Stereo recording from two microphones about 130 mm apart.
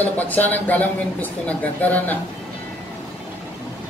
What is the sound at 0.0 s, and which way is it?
Speech, 15° left (ahead or behind).